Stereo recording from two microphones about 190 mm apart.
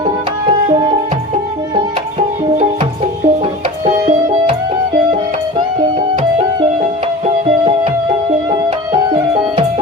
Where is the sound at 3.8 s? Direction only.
30° right (ahead or behind).